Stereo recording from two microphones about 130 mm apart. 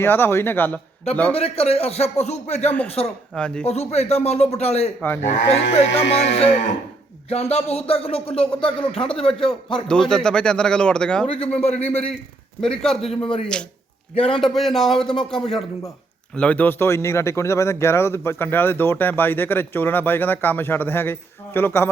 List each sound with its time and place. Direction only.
0.0 s speech: 15° left (ahead or behind)
1.4 s speech: 50° left (ahead or behind)
3.3 s speech: 5° left (ahead or behind)
3.7 s speech: 55° left (ahead or behind)
9.8 s speech: 5° left (ahead or behind)
11.3 s speech: 50° left (ahead or behind)
12.6 s speech: 5° left (ahead or behind)
14.2 s speech: 45° left (ahead or behind)
14.4 s speech: centre (ahead or behind); by 21.8 s 20° left (ahead or behind)